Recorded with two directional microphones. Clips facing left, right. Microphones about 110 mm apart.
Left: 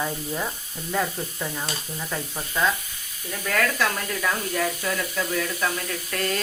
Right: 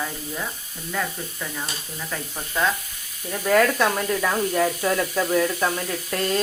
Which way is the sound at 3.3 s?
20° right (ahead or behind).